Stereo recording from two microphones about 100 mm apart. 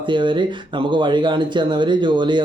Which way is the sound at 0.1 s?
50° right (ahead or behind).